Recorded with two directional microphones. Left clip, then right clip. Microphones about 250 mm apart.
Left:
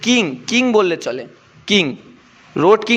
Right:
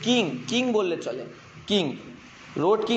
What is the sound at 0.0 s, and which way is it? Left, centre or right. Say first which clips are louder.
A man's voice: left 7 dB; left.